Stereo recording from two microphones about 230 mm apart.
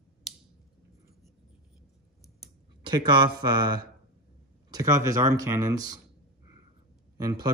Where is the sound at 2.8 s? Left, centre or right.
Centre.